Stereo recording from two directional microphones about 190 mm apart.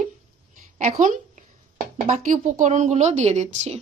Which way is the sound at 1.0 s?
40° right (ahead or behind).